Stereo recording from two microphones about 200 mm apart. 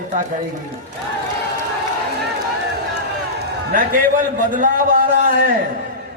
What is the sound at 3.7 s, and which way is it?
A man's voice, 45° right (ahead or behind).